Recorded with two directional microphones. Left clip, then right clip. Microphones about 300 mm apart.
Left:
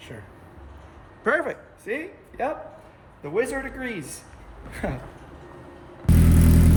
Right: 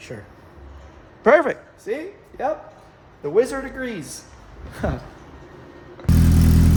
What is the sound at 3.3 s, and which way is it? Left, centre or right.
A man's voice, centre.